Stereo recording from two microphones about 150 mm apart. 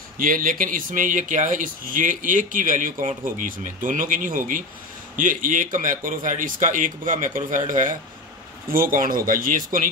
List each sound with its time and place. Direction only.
0.2 s speech: 65° right (ahead or behind)